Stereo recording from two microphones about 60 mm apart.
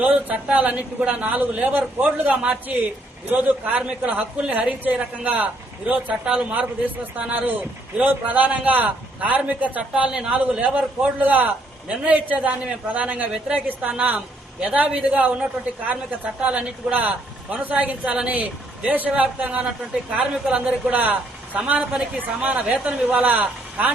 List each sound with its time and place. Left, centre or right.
0.0 s a man's voice: right
3.2 s a man's voice: right
3.8 s a man's voice: right
7.3 s a man's voice: right
10.1 s a man's voice: centre
10.3 s a man's voice: right
18.0 s a man's voice: centre
18.3 s a man's voice: right
20.9 s a man's voice: right
23.1 s a man's voice: right